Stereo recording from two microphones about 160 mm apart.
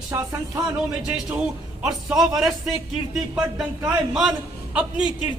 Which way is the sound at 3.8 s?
Centre (ahead or behind).